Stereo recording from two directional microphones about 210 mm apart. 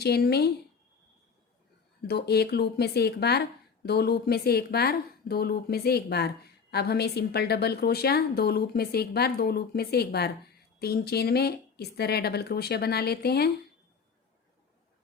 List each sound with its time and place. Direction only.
0.0 s speech: 50° left (ahead or behind)
2.0 s speech: 50° left (ahead or behind)